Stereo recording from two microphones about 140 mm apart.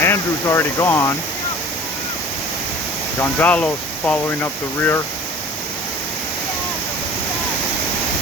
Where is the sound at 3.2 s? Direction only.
10° left (ahead or behind).